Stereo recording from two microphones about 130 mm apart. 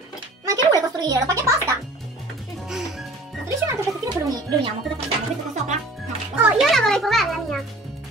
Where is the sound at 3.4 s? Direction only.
25° right (ahead or behind).